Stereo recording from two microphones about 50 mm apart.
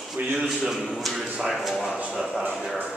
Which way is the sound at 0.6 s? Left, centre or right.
Centre.